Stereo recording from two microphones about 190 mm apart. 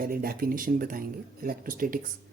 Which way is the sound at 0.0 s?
50° right (ahead or behind).